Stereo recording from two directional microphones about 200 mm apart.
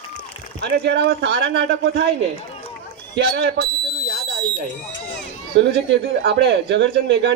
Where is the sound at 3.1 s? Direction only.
55° right (ahead or behind).